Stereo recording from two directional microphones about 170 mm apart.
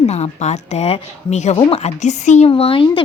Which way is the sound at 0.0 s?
40° left (ahead or behind).